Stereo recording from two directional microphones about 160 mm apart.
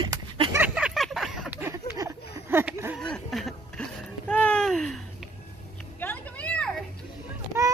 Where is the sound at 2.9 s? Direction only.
5° left (ahead or behind).